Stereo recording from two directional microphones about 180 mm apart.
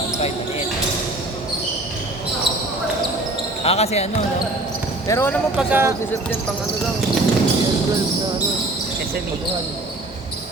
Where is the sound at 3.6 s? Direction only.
35° left (ahead or behind).